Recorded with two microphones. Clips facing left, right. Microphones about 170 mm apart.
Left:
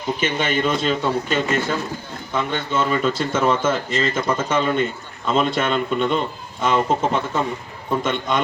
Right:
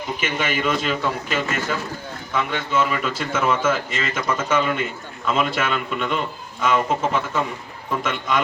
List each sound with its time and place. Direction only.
0.2 s speech: 30° left (ahead or behind)